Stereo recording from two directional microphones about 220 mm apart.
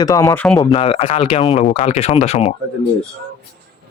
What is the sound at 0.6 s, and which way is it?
Speech, 20° left (ahead or behind).